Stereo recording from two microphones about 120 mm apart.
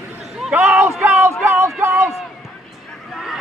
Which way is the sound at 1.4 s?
20° right (ahead or behind).